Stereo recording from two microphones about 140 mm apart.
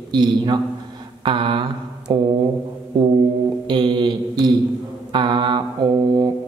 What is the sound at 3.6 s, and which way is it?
Speech, 30° right (ahead or behind).